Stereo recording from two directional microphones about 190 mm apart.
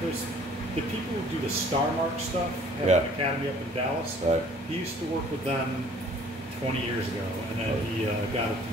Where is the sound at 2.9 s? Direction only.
40° right (ahead or behind).